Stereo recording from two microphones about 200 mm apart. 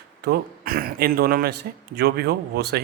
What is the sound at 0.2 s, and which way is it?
Speech, 50° right (ahead or behind).